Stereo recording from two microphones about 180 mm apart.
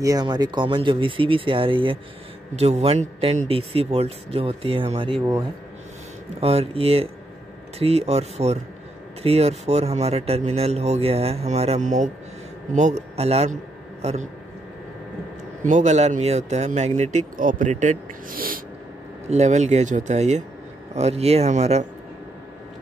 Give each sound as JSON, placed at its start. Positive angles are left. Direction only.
{"t": 0.0, "sound": "speech", "side_deg": -20}
{"t": 5.2, "sound": "speech", "side_deg": -15}
{"t": 6.4, "sound": "speech", "side_deg": -35}
{"t": 15.6, "sound": "speech", "side_deg": -40}
{"t": 19.2, "sound": "speech", "side_deg": -40}